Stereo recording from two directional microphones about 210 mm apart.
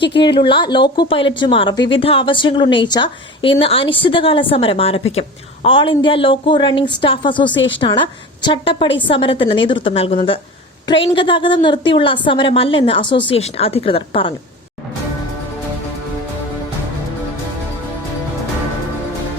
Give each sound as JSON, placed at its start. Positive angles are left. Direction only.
{"t": 0.2, "sound": "speech", "side_deg": 25}
{"t": 7.5, "sound": "speech", "side_deg": 60}
{"t": 7.8, "sound": "speech", "side_deg": 25}